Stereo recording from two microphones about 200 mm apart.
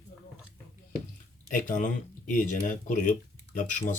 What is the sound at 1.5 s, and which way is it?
Speech, 40° left (ahead or behind).